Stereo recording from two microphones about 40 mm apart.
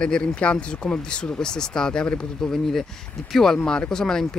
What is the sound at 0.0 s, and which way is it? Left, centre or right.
Speech, left.